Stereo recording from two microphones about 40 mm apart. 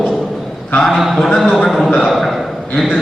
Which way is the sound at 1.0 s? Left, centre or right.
Centre.